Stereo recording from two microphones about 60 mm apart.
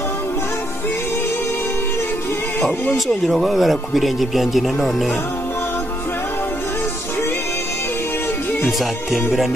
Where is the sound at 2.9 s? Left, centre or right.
Centre.